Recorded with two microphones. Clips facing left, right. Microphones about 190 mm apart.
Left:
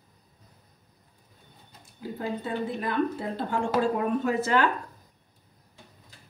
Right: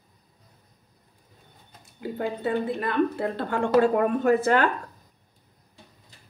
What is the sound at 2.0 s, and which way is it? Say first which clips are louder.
Speech: right 4 dB; 65° right (ahead or behind).